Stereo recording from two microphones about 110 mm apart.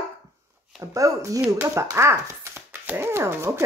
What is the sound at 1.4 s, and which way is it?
Speech, 15° right (ahead or behind).